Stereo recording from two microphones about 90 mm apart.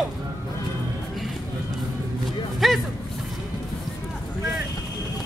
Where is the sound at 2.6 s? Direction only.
Centre (ahead or behind).